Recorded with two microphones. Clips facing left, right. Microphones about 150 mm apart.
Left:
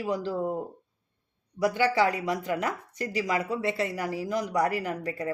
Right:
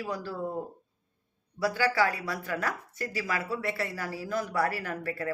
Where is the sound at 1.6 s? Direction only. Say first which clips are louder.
Left 3 dB; 20° left (ahead or behind).